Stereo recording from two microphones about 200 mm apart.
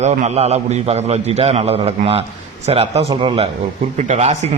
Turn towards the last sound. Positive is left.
turn(degrees=-35)  # may be behind; listen again after turning